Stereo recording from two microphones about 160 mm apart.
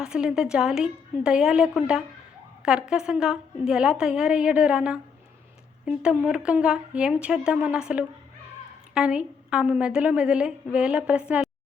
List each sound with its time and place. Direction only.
0.0 s a woman's voice: 5° right (ahead or behind)